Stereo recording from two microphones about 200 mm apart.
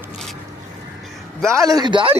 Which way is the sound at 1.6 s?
20° right (ahead or behind).